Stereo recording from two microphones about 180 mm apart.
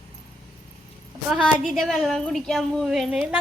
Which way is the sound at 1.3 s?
Centre (ahead or behind).